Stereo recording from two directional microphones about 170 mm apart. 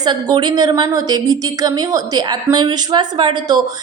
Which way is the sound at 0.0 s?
25° right (ahead or behind).